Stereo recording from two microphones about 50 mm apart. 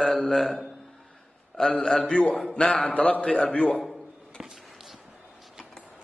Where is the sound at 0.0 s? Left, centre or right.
Centre.